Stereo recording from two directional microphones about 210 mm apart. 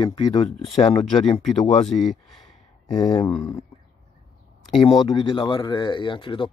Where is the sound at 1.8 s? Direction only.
Centre (ahead or behind).